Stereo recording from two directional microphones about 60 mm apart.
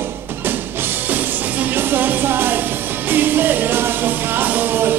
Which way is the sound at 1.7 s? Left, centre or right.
Right.